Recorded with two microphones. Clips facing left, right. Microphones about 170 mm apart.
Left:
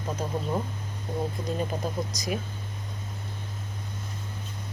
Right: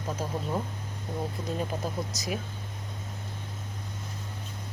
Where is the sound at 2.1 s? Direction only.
5° right (ahead or behind).